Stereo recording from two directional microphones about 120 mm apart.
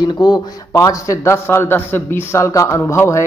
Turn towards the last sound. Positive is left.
turn(degrees=25)  # may be behind; listen again after turning